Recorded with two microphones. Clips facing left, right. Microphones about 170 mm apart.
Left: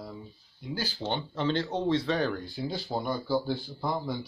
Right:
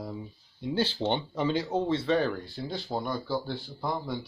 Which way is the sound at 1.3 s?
10° right (ahead or behind).